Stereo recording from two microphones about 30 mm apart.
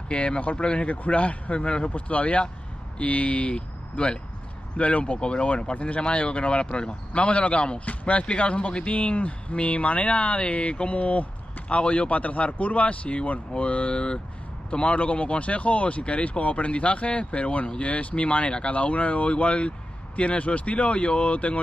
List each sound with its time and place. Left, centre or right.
0.1 s speech: left
0.8 s speech: left
1.6 s speech: left
2.0 s speech: left
3.5 s speech: left
5.2 s speech: left
8.2 s speech: left